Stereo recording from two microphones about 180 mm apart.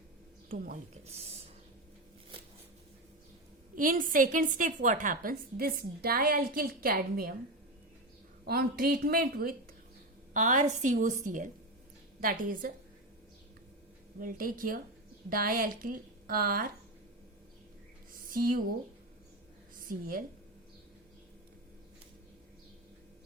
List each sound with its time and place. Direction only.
0.4 s speech: 50° right (ahead or behind)
1.0 s speech: 35° right (ahead or behind)
3.8 s a woman's voice: 50° right (ahead or behind)
8.4 s speech: 55° right (ahead or behind)
10.3 s a woman's voice: 45° right (ahead or behind)
14.2 s a woman's voice: 50° right (ahead or behind)
18.1 s a sound: 50° right (ahead or behind)
19.7 s a woman's voice: 50° right (ahead or behind)